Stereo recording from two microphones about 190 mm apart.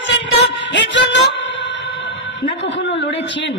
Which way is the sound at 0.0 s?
70° left (ahead or behind).